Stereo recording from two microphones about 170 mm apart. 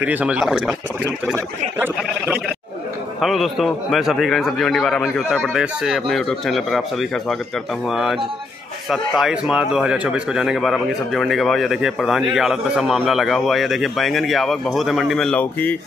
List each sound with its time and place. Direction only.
0.0 s speech: 10° right (ahead or behind)
3.2 s a man's voice: centre (ahead or behind)